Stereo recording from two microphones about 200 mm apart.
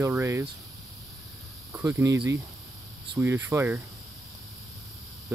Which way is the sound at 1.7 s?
10° right (ahead or behind).